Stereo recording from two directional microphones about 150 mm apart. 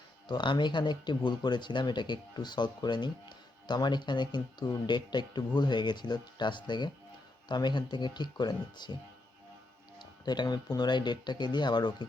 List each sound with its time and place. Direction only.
0.3 s speech: 30° left (ahead or behind)
10.0 s speech: 30° left (ahead or behind)